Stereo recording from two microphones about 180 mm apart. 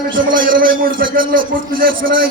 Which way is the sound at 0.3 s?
50° right (ahead or behind).